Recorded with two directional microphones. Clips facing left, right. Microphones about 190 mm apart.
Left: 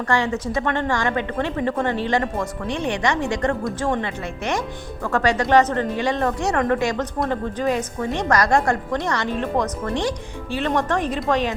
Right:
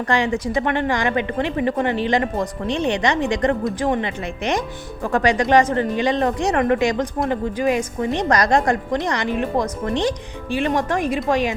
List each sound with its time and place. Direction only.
0.1 s a woman's voice: 15° right (ahead or behind)